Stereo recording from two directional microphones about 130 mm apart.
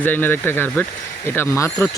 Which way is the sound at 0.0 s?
15° left (ahead or behind).